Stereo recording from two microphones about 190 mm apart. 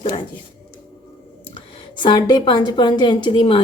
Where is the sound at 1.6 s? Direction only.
25° left (ahead or behind).